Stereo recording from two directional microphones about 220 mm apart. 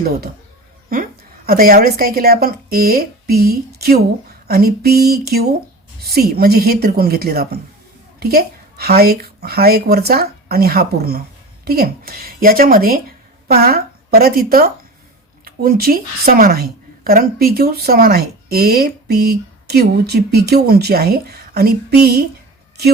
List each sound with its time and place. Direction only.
0.9 s a woman's voice: 40° right (ahead or behind)